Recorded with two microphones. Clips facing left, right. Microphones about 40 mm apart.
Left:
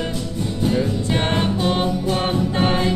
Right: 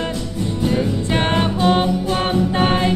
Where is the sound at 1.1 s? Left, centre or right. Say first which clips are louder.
Right 2 dB; right.